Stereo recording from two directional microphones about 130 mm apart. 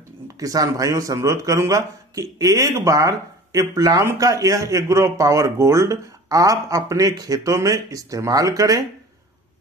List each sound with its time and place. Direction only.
0.4 s speech: 25° right (ahead or behind)